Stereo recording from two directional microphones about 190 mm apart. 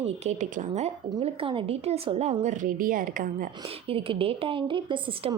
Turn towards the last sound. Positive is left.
turn(degrees=-25)  # may be behind; listen again after turning